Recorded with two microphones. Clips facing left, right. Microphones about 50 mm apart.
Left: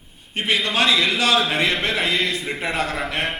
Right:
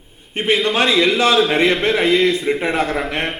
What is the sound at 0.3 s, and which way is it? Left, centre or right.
A man's voice, right.